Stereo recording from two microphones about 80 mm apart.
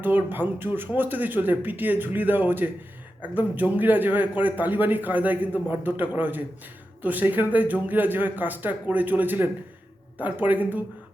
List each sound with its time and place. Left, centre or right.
0.0 s speech: right